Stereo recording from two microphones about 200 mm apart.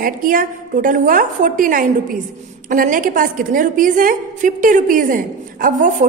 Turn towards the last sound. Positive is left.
turn(degrees=-45)  # may be behind; listen again after turning